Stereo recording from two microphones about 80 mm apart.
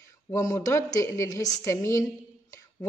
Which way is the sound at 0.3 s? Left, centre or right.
Left.